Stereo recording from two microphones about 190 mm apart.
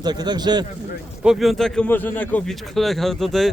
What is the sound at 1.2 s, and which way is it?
Speech, centre (ahead or behind).